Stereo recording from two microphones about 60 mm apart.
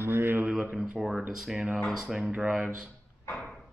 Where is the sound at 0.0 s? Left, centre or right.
Right.